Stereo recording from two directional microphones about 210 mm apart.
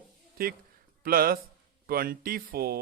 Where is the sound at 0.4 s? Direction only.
45° right (ahead or behind).